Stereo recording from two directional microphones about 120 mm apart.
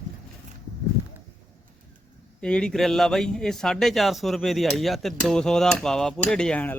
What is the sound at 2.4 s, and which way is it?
A man's voice, 5° left (ahead or behind).